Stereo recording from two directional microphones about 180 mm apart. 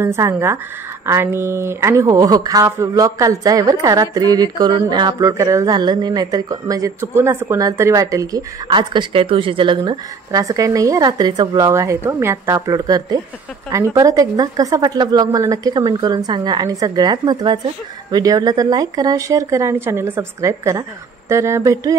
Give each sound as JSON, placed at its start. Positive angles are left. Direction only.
{"t": 0.0, "sound": "speech", "side_deg": -15}